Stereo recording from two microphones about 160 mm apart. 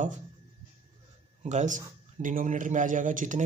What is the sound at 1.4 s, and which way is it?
A man's voice, 50° right (ahead or behind).